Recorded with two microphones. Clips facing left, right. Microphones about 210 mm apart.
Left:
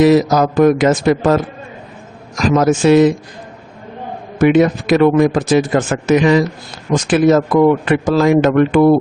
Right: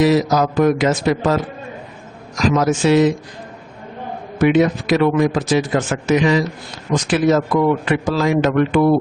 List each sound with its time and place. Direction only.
0.0 s a man's voice: 50° left (ahead or behind)
2.4 s a man's voice: 50° left (ahead or behind)
4.4 s a man's voice: 50° left (ahead or behind)